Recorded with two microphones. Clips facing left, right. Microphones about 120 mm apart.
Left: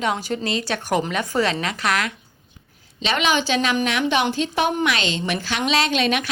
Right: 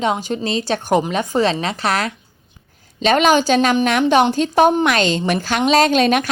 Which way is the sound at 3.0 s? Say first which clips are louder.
Right 7 dB; 45° right (ahead or behind).